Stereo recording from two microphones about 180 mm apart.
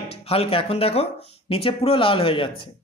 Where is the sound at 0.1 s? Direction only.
35° left (ahead or behind).